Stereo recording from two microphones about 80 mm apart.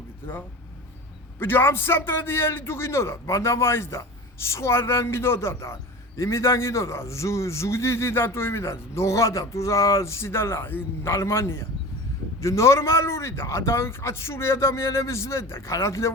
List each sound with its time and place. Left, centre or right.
1.4 s a man's voice: left